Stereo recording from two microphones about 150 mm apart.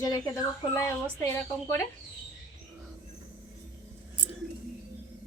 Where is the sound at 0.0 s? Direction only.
25° left (ahead or behind).